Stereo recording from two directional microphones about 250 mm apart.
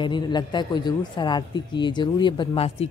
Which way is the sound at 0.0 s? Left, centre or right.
Centre.